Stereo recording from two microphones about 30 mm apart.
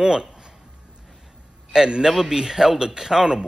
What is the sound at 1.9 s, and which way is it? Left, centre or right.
A man's voice, right.